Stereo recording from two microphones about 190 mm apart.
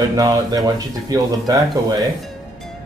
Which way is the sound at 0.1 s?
15° right (ahead or behind).